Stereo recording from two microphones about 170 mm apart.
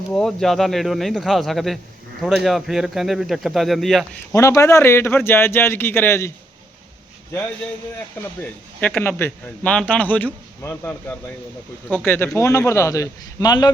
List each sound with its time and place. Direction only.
0.1 s speech: 5° left (ahead or behind)
4.3 s a man's voice: 20° left (ahead or behind)
8.4 s a man's voice: 5° left (ahead or behind)
12.0 s a man's voice: 10° left (ahead or behind)